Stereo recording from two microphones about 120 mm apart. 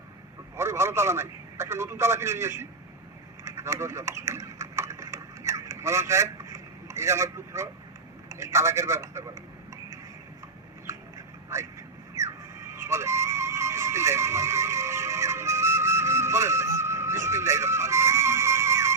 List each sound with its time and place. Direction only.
0.5 s a man's voice: 20° right (ahead or behind)
3.4 s a sound: 25° right (ahead or behind)
8.3 s a man's voice: 25° right (ahead or behind)
11.5 s a man's voice: 25° right (ahead or behind)
12.1 s music: 25° right (ahead or behind)